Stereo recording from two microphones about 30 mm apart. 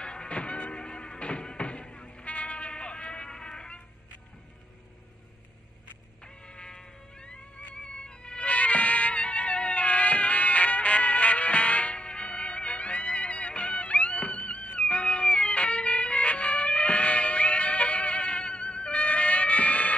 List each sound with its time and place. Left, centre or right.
0.0 s music: left
2.2 s music: left
3.3 s music: left
6.2 s cat: left
7.7 s music: left